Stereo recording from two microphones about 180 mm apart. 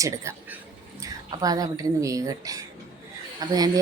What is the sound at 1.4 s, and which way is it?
A woman's voice, 20° right (ahead or behind).